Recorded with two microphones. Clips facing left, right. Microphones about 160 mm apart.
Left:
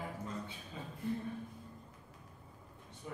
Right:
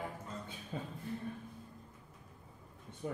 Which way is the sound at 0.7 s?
55° right (ahead or behind).